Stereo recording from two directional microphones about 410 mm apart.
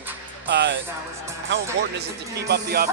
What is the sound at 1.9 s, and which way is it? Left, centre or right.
Speech, right.